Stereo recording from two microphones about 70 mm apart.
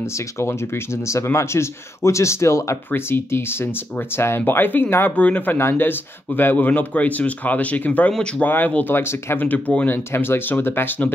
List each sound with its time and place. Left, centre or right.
1.0 s speech: left
10.1 s speech: left